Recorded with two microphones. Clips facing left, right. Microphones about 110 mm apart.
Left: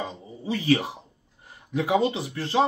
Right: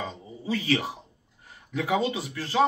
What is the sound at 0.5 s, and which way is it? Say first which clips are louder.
Speech: left 3 dB; 20° left (ahead or behind).